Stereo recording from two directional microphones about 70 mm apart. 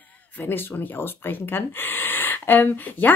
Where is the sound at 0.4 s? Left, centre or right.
Left.